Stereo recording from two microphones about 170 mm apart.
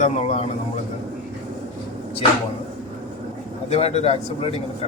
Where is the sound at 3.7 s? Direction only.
40° left (ahead or behind).